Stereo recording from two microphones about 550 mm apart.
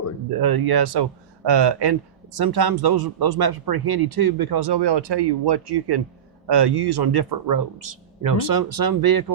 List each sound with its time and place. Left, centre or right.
0.3 s speech: right